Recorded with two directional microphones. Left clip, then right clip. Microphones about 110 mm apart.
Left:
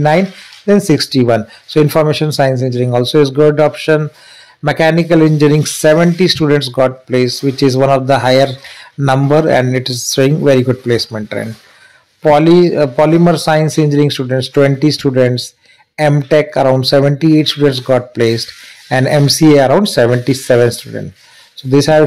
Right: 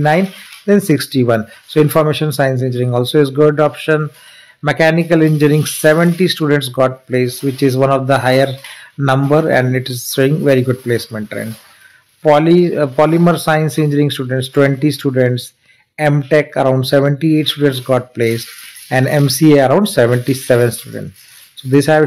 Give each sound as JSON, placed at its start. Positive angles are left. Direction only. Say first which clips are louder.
{"t": 0.0, "sound": "a man's voice", "louder": "left 2 dB", "side_deg": 20}